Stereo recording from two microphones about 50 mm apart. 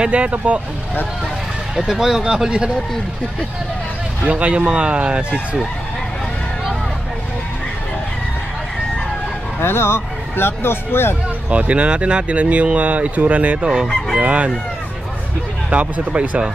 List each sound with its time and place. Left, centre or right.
0.0 s speech: right
1.9 s speech: centre
4.2 s speech: right
9.6 s speech: left
11.5 s speech: right
15.7 s speech: right